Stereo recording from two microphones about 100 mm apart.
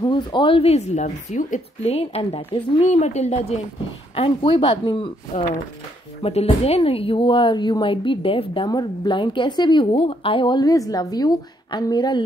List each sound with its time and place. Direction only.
0.0 s a woman's voice: 50° left (ahead or behind); by 3.5 s 90° left
4.1 s speech: 70° left (ahead or behind)
6.2 s a woman's voice: 80° left; by 8.6 s 65° left (ahead or behind)
8.6 s a woman's voice: 45° left (ahead or behind)